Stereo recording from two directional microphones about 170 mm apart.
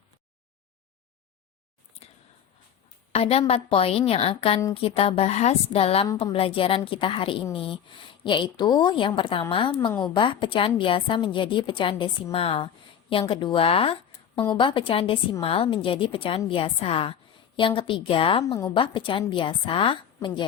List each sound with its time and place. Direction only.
3.1 s a woman's voice: 35° left (ahead or behind)